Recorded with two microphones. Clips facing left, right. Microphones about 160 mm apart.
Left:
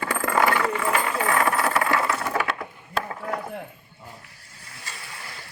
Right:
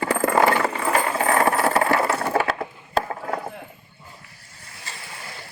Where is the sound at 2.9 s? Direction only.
35° right (ahead or behind).